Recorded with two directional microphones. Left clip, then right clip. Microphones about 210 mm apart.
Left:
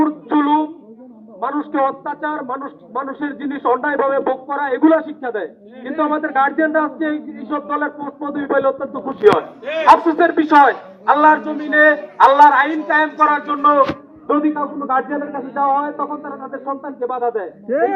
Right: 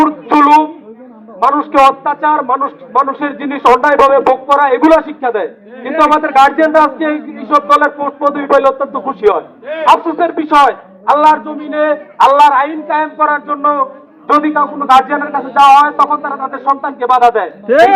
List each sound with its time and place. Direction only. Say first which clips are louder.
0.0 s a sound: right 8 dB; 20° right (ahead or behind)
1.4 s a man's voice: right 10 dB; 20° right (ahead or behind)
9.8 s a man's voice: right 2 dB; 10° right (ahead or behind)
14.8 s a man's voice: right 11 dB; 25° right (ahead or behind)
16.2 s speech: right 11 dB; 40° right (ahead or behind)
17.1 s a man's voice: right 13 dB; 20° right (ahead or behind)
17.7 s a woman's voice: right 10 dB; 60° right (ahead or behind)